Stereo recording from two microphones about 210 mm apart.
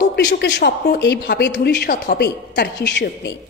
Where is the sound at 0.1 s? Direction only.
55° left (ahead or behind).